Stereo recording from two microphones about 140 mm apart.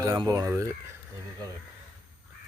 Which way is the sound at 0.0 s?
25° right (ahead or behind).